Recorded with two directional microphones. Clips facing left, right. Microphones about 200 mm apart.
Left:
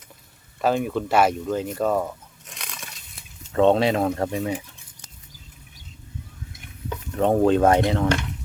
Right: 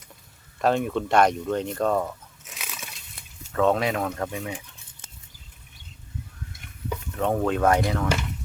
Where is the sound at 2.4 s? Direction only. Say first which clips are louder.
Even; 5° right (ahead or behind).